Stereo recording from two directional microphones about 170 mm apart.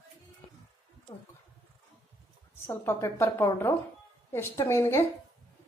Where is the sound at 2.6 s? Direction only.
15° left (ahead or behind).